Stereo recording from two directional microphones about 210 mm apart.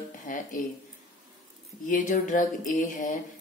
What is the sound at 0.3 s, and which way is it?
Speech, 40° left (ahead or behind).